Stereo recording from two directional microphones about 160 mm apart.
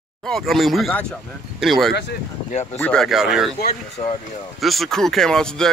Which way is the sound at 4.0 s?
45° left (ahead or behind).